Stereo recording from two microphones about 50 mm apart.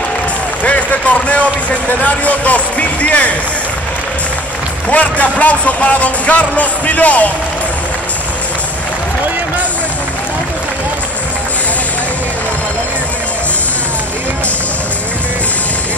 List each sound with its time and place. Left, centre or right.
0.7 s a sound: left
1.9 s speech: left
4.8 s speech: left